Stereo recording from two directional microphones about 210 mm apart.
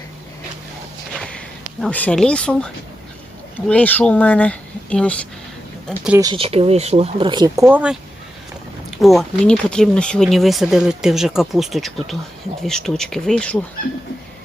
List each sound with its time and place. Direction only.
1.1 s a sound: 5° left (ahead or behind)
1.8 s speech: 5° left (ahead or behind)
5.9 s speech: 10° right (ahead or behind)
9.0 s speech: centre (ahead or behind)